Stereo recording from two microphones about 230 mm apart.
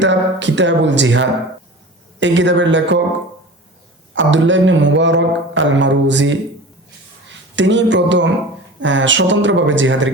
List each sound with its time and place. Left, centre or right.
0.0 s speech: right
4.1 s speech: right